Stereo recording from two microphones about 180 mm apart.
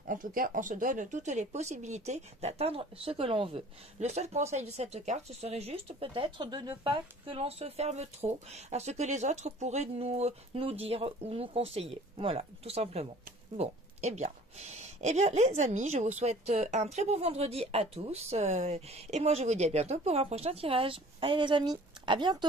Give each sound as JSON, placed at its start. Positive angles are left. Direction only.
{"t": 0.0, "sound": "speech", "side_deg": -50}